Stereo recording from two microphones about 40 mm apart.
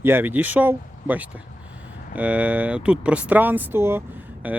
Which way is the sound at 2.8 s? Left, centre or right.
Right.